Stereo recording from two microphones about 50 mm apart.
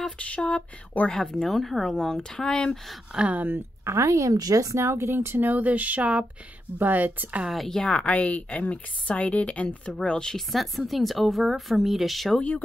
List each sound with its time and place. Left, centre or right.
0.2 s speech: left
1.1 s a woman's voice: centre
2.0 s speech: centre
3.5 s speech: right
5.1 s speech: right
7.5 s speech: centre
8.0 s speech: left
10.0 s speech: centre
10.5 s a woman's voice: centre
12.4 s speech: left